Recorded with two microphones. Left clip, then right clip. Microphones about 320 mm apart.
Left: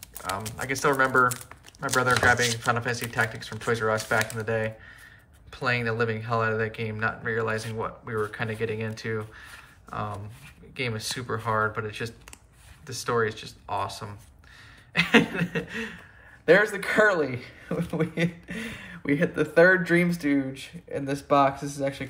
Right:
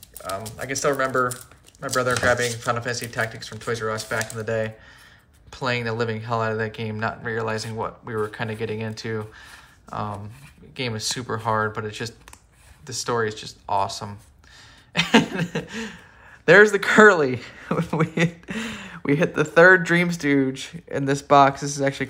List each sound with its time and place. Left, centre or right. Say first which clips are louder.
0.6 s speech: even; centre
16.4 s speech: right 7 dB; right